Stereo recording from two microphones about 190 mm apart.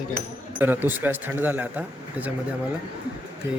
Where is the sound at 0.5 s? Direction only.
10° right (ahead or behind).